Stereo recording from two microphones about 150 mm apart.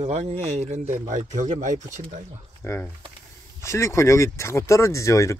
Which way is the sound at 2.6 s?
15° left (ahead or behind).